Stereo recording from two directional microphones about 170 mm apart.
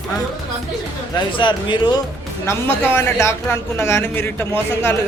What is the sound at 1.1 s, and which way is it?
Speech, 30° left (ahead or behind).